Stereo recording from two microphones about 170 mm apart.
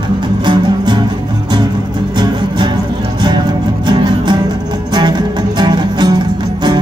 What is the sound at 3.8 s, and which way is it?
Music, 25° right (ahead or behind).